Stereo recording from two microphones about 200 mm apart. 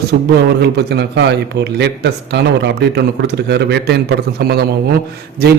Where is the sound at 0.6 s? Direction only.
55° right (ahead or behind).